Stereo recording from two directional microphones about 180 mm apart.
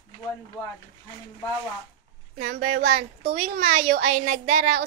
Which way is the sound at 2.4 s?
45° right (ahead or behind).